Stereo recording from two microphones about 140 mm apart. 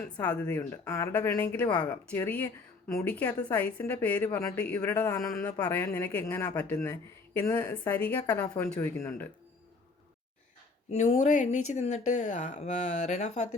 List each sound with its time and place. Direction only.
0.2 s speech: 10° left (ahead or behind)
10.9 s speech: 55° left (ahead or behind)